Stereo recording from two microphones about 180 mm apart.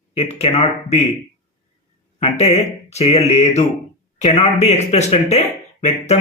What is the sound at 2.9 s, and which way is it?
Speech, 35° left (ahead or behind).